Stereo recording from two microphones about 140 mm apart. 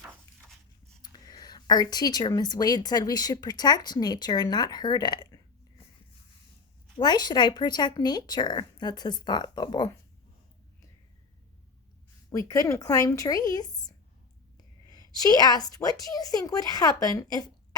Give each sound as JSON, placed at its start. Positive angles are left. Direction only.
{"t": 1.0, "sound": "a woman's voice", "side_deg": 30}
{"t": 7.0, "sound": "speech", "side_deg": 30}
{"t": 12.5, "sound": "a woman's voice", "side_deg": 25}
{"t": 15.2, "sound": "a woman's voice", "side_deg": 30}